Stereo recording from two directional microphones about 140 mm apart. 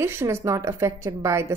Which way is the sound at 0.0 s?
15° right (ahead or behind).